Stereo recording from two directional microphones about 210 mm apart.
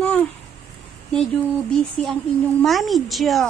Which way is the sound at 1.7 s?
5° left (ahead or behind).